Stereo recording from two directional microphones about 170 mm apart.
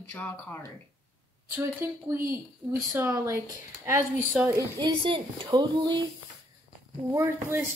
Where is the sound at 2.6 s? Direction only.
30° right (ahead or behind).